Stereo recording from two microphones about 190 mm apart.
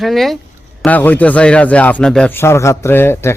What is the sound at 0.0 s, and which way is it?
Speech, centre (ahead or behind).